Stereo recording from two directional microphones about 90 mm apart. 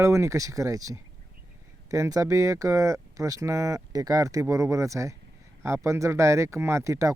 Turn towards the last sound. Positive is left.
turn(degrees=-35)  # may be behind; listen again after turning